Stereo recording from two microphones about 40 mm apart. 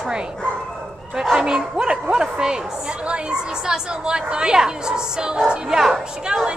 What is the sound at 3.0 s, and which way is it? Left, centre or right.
Chatter, right.